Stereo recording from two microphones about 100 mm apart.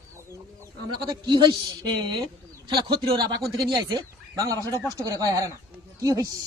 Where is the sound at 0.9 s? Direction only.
40° right (ahead or behind).